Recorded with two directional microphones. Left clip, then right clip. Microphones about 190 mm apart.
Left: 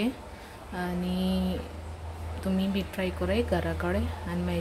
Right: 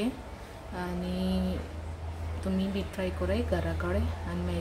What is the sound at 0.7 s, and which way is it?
Speech, 15° left (ahead or behind).